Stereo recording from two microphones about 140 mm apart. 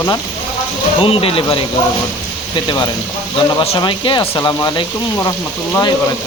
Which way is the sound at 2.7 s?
30° left (ahead or behind).